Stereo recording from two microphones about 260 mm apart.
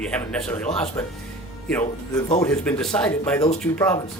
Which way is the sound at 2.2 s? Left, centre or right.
Left.